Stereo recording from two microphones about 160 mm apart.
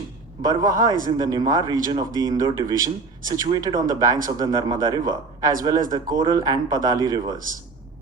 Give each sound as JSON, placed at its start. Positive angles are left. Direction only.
{"t": 0.4, "sound": "speech", "side_deg": -25}